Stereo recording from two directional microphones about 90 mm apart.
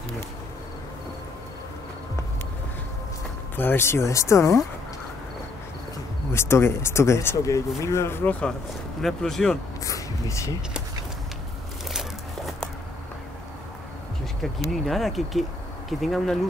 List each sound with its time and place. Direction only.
3.5 s speech: 25° left (ahead or behind)
6.3 s speech: 30° left (ahead or behind)
9.0 s speech: 5° left (ahead or behind)
9.8 s a sound: 35° left (ahead or behind)
11.9 s a sound: centre (ahead or behind)
14.4 s speech: centre (ahead or behind)